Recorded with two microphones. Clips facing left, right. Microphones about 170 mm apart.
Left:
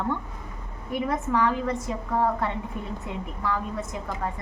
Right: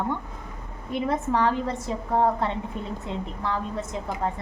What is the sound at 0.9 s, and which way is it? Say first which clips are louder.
A woman's voice: right 1 dB; 30° right (ahead or behind).